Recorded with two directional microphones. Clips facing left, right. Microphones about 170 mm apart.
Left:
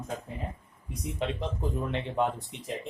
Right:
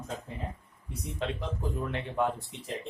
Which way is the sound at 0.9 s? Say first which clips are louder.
Left 2 dB; 20° left (ahead or behind).